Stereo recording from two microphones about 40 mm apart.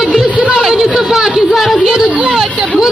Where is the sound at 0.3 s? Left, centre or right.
Centre.